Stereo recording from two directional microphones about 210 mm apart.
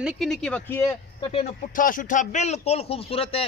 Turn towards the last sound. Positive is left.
turn(degrees=25)  # may be behind; listen again after turning